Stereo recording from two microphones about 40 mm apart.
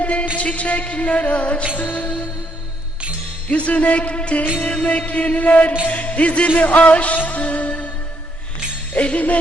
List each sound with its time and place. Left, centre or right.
0.0 s a sound: left
0.3 s a man's voice: left
1.8 s music: left
3.5 s a man's voice: left
6.6 s music: left
8.9 s jingle bell: left